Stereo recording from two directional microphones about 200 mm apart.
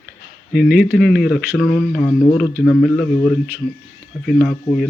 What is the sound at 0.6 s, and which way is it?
Speech, 45° left (ahead or behind).